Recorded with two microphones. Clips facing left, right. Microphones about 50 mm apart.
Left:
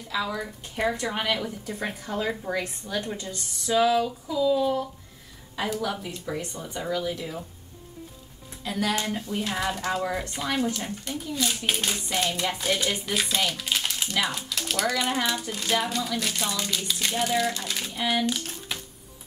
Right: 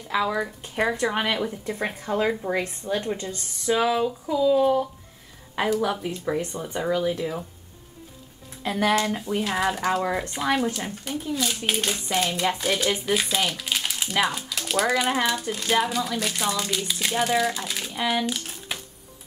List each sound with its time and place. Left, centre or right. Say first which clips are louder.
0.1 s speech: right 5 dB; right
5.6 s a woman's voice: right 5 dB; right
8.6 s speech: right 5 dB; right; by 11.1 s centre
11.3 s a child's voice: even; centre
15.7 s speech: right 3 dB; centre
17.9 s speech: right 2 dB; centre
18.2 s crumpling: left 1 dB; centre